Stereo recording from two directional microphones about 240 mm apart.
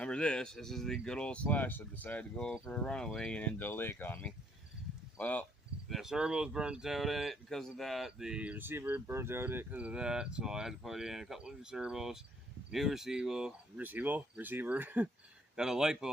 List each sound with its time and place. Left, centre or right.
0.0 s speech: centre